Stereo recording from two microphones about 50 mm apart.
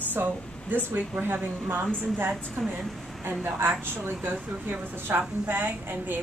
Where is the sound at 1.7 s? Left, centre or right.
Right.